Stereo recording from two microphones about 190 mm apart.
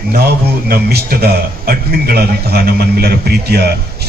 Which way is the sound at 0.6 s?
55° right (ahead or behind).